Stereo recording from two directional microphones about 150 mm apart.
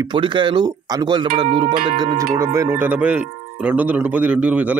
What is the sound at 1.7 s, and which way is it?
Music, 75° right (ahead or behind).